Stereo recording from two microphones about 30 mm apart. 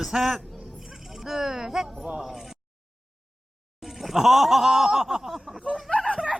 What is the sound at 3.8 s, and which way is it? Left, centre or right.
Laughter, centre.